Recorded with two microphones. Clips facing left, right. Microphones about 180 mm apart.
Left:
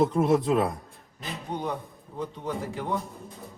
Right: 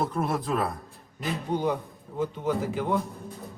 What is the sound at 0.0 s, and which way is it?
Speech, 25° left (ahead or behind).